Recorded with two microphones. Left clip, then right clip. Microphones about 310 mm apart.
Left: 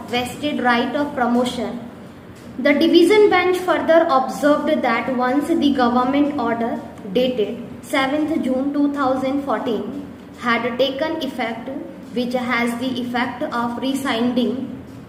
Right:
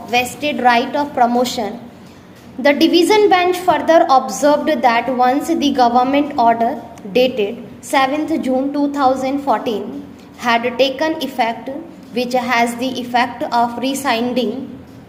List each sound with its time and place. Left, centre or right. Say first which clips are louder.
0.1 s a woman's voice: right 6 dB; right
2.6 s a woman's voice: right 2 dB; right